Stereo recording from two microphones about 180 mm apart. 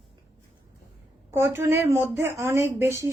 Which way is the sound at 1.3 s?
15° right (ahead or behind).